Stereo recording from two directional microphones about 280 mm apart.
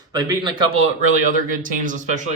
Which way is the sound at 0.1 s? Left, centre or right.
Centre.